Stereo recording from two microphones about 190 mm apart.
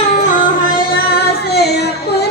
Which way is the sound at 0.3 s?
45° left (ahead or behind).